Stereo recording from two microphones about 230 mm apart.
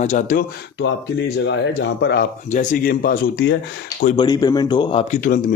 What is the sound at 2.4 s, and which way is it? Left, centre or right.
A man's voice, left.